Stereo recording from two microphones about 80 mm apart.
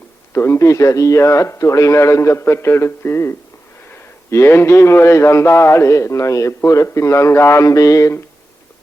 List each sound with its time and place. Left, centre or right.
0.3 s a man's voice: left